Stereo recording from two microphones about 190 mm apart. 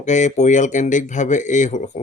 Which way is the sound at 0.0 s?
40° left (ahead or behind).